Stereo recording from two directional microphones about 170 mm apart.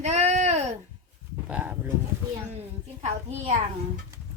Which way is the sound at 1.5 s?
10° right (ahead or behind).